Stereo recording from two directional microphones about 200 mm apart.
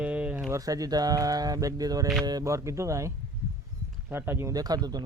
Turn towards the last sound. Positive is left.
turn(degrees=-20)  # may be behind; listen again after turning